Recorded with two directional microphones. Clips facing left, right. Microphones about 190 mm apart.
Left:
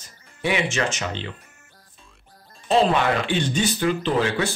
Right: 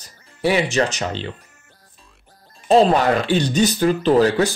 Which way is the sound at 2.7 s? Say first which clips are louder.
Right 5 dB; 40° right (ahead or behind).